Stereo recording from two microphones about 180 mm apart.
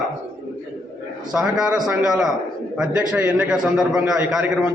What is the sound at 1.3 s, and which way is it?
A man's voice, 5° right (ahead or behind).